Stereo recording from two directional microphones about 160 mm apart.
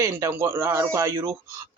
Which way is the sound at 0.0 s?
20° right (ahead or behind).